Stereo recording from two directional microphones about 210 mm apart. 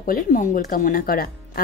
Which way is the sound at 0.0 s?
40° left (ahead or behind).